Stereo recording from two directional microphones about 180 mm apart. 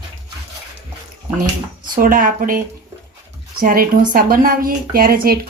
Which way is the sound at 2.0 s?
50° right (ahead or behind).